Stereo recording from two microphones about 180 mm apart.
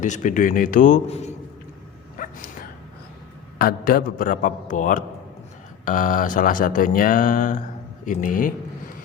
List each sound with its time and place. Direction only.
0.0 s speech: 45° left (ahead or behind)
2.1 s a sound: 50° left (ahead or behind)
3.6 s speech: 55° left (ahead or behind)